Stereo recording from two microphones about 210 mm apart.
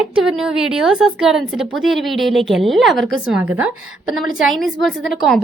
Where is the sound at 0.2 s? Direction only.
5° right (ahead or behind).